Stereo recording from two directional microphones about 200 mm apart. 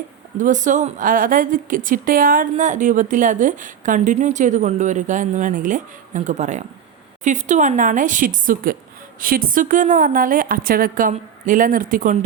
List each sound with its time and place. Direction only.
0.3 s a woman's voice: 40° right (ahead or behind)